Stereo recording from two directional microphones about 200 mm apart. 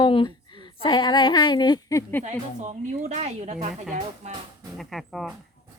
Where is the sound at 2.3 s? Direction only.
35° right (ahead or behind).